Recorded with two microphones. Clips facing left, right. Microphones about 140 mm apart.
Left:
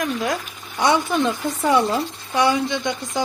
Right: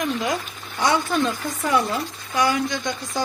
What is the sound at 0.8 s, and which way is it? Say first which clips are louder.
Speech: left 2 dB; 20° left (ahead or behind).